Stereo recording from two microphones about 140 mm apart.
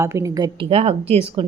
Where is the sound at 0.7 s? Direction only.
45° right (ahead or behind).